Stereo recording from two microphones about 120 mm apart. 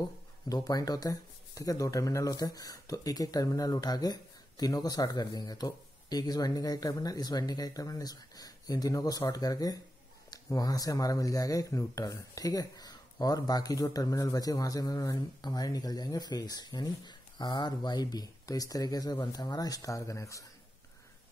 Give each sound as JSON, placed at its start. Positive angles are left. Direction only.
{"t": 0.7, "sound": "speech", "side_deg": 30}